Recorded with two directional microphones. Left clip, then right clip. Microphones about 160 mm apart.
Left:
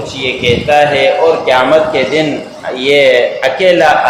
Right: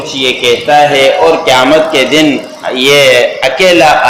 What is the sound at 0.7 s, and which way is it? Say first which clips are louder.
A man's voice: right 3 dB; 35° right (ahead or behind).